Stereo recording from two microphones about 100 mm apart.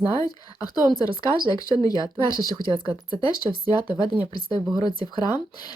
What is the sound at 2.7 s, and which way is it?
Speech, 65° right (ahead or behind).